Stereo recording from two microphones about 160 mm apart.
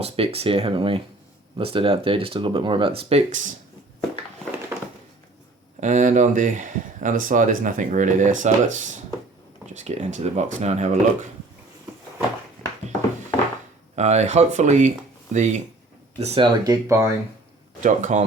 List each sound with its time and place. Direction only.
0.0 s speech: 40° right (ahead or behind)
4.7 s a sound: 15° right (ahead or behind)
5.8 s speech: 50° right (ahead or behind)
13.9 s speech: 45° right (ahead or behind)
16.6 s speech: 20° right (ahead or behind)
17.8 s speech: 50° right (ahead or behind)